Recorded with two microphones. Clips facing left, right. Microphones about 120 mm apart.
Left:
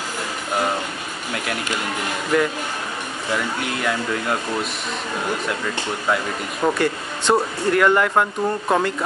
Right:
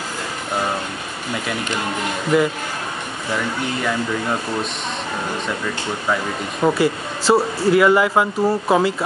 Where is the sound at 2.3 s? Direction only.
5° right (ahead or behind).